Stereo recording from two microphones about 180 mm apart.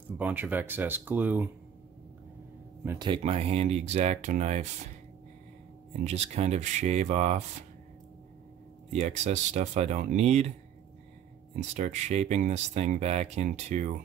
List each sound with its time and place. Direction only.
0.2 s speech: 10° right (ahead or behind)
3.0 s speech: 30° right (ahead or behind)
6.0 s speech: 35° right (ahead or behind)
8.9 s speech: 40° right (ahead or behind)
11.5 s speech: 40° right (ahead or behind)